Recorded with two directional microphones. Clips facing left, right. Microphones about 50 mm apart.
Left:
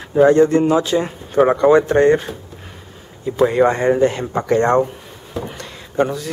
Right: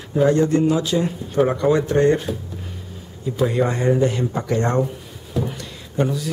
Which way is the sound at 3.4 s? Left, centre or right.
Left.